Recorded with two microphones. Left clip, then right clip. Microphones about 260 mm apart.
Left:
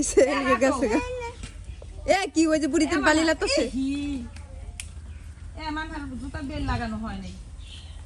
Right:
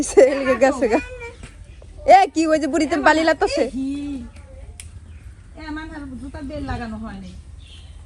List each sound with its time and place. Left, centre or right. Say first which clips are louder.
0.0 s a woman's voice: right 7 dB; centre